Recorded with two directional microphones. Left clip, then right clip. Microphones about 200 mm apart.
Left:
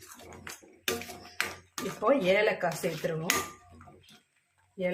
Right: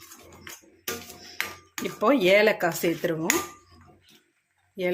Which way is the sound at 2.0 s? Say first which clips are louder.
Right 6 dB; 55° right (ahead or behind).